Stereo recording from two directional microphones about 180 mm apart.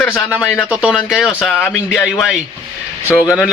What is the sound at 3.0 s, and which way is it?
Speech, 15° left (ahead or behind).